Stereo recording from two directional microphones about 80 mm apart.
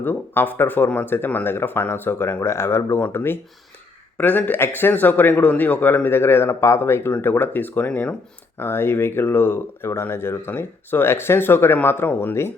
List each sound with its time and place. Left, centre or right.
0.0 s speech: left
8.5 s speech: left